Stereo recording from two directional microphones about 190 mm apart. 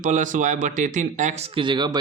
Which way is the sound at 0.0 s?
40° right (ahead or behind).